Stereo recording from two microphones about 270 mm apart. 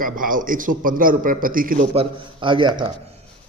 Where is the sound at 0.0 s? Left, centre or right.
Right.